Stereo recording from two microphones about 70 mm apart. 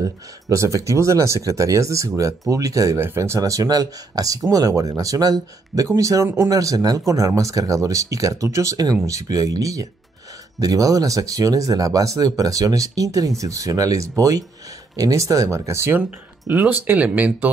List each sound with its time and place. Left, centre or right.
0.0 s speech: right
5.9 s speech: right
6.5 s speech: right
16.4 s speech: right